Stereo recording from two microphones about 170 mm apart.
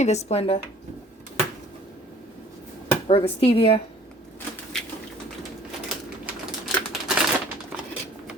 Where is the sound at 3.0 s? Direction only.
35° left (ahead or behind).